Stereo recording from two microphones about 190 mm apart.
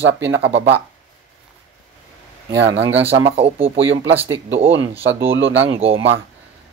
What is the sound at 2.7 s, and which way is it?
Speech, 70° right (ahead or behind).